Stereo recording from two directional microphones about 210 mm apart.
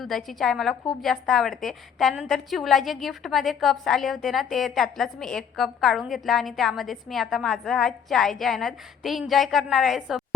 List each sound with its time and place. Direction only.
0.0 s a woman's voice: centre (ahead or behind)